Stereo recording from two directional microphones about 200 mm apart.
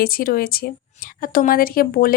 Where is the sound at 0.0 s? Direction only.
45° left (ahead or behind).